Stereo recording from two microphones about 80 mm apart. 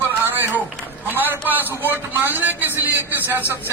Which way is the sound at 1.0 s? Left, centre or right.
Right.